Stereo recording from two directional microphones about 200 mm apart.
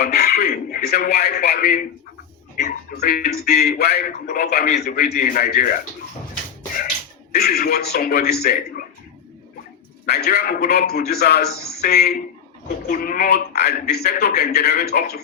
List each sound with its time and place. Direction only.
0.0 s a sound: 50° left (ahead or behind)
3.0 s a man's voice: 50° left (ahead or behind)
7.3 s a man's voice: 50° left (ahead or behind)
10.1 s a man's voice: 55° left (ahead or behind)